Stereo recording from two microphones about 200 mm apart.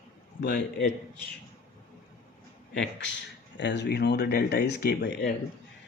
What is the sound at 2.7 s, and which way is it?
Speech, 60° left (ahead or behind).